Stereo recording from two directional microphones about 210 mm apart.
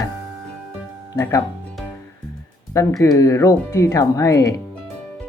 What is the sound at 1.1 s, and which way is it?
Speech, 15° left (ahead or behind).